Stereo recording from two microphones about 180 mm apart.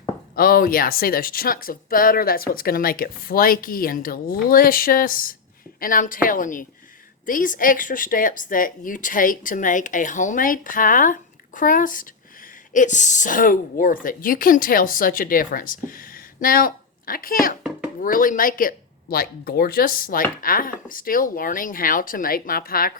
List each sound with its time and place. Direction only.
0.3 s speech: 55° left (ahead or behind)